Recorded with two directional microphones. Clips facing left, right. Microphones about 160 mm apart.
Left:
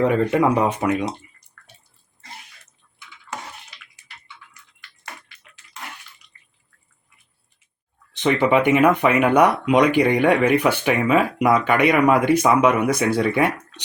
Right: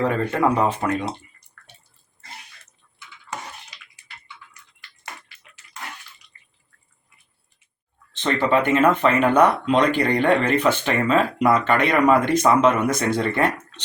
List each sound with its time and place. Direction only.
0.0 s speech: 15° left (ahead or behind)
8.1 s speech: 15° left (ahead or behind)